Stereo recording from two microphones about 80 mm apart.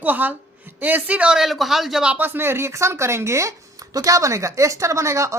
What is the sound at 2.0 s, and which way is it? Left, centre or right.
Speech, right.